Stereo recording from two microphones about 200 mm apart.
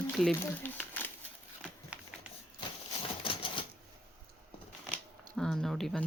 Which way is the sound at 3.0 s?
25° left (ahead or behind).